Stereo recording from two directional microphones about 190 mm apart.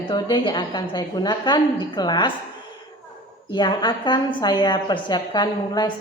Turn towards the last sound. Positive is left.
turn(degrees=20)  # may be behind; listen again after turning